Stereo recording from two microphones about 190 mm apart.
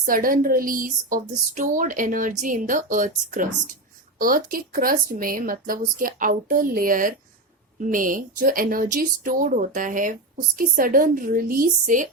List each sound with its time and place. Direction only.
0.0 s speech: 45° right (ahead or behind)